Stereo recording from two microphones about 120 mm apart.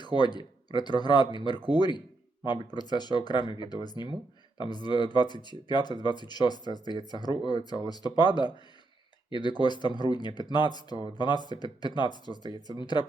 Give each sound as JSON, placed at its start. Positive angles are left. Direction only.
{"t": 0.0, "sound": "speech", "side_deg": 35}